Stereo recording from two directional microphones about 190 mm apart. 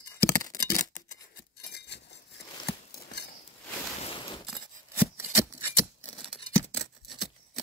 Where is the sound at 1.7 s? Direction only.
60° left (ahead or behind).